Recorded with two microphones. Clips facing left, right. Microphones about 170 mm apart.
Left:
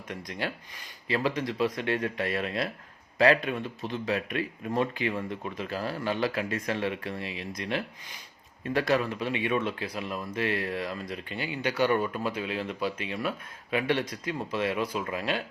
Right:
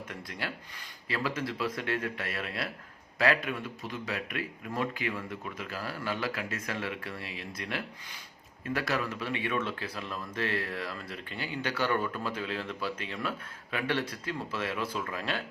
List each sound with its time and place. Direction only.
0.3 s speech: 20° left (ahead or behind)